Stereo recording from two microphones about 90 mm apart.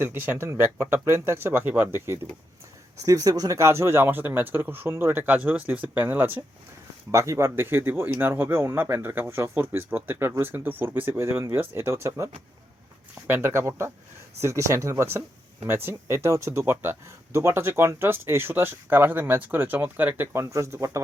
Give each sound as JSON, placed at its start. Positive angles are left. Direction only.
{"t": 0.0, "sound": "speech", "side_deg": -25}
{"t": 3.0, "sound": "speech", "side_deg": -40}
{"t": 7.1, "sound": "speech", "side_deg": -35}